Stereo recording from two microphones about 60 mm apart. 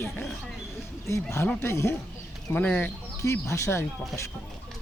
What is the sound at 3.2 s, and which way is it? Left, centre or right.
Speech, left.